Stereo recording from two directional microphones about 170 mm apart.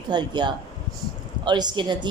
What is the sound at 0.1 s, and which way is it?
A woman's voice, 25° right (ahead or behind).